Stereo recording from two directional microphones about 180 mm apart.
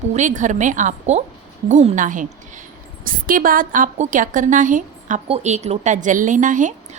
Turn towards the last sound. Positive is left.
turn(degrees=-45)  # may be behind; listen again after turning